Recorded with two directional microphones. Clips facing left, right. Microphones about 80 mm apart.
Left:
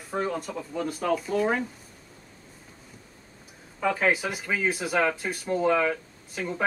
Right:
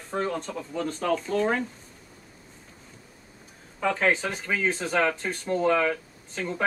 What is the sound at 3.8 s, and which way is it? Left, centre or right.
Speech, centre.